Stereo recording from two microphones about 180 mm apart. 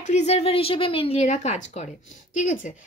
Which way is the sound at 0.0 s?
40° left (ahead or behind).